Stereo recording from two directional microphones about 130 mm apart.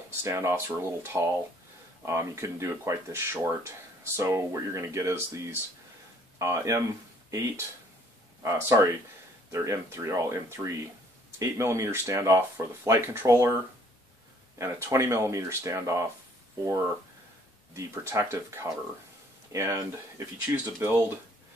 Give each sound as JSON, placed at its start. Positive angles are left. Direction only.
{"t": 0.2, "sound": "speech", "side_deg": -20}
{"t": 14.6, "sound": "speech", "side_deg": -20}
{"t": 17.7, "sound": "speech", "side_deg": -25}